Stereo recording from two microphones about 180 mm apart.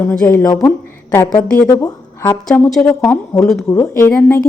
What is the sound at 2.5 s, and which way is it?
Speech, centre (ahead or behind).